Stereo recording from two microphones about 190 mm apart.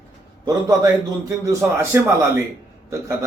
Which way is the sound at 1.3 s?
15° right (ahead or behind).